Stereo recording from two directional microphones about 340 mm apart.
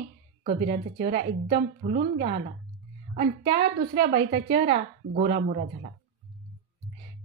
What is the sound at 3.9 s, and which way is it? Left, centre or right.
A woman's voice, right.